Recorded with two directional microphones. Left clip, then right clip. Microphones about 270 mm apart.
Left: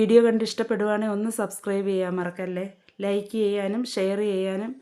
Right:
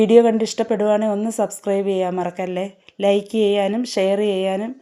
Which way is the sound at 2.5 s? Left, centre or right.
Centre.